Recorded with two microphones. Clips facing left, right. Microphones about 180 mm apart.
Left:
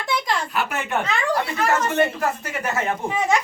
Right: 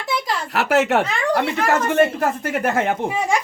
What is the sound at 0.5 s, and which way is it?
Speech, 75° right (ahead or behind).